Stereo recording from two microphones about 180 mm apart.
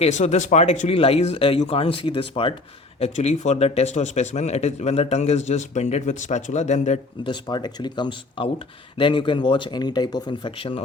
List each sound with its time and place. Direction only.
0.0 s speech: 40° left (ahead or behind)
7.3 s speech: 25° left (ahead or behind)